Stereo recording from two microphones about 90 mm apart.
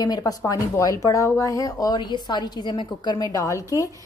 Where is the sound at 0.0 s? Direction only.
45° left (ahead or behind).